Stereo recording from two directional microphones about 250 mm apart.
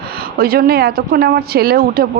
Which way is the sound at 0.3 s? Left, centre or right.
Right.